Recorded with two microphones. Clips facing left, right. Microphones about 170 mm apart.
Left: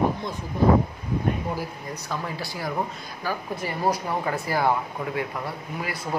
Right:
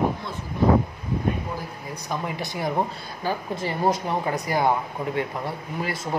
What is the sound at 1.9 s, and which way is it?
Speech, 20° right (ahead or behind).